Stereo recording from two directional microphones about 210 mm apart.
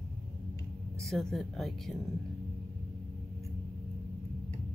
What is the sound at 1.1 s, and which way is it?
Speech, centre (ahead or behind).